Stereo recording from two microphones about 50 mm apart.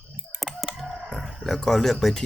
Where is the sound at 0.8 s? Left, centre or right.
Centre.